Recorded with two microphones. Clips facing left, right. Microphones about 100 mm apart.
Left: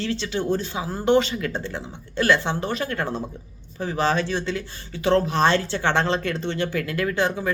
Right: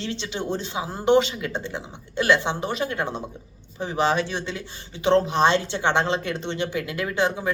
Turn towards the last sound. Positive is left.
turn(degrees=-15)  # may be behind; listen again after turning